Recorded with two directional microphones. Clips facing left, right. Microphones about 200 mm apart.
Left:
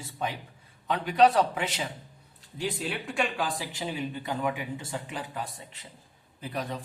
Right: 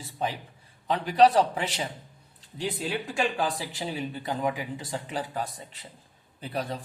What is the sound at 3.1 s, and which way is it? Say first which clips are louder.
Speech: right 1 dB; 40° right (ahead or behind).